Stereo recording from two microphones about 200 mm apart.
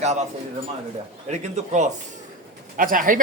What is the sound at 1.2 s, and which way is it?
A woman's voice, 35° right (ahead or behind).